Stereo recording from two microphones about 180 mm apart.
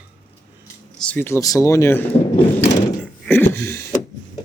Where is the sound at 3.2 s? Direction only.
10° left (ahead or behind).